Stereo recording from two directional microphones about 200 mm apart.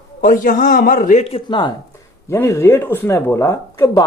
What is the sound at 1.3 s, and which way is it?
Speech, 25° left (ahead or behind).